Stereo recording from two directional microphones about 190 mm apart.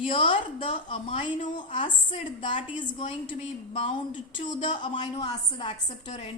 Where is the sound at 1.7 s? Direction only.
25° left (ahead or behind).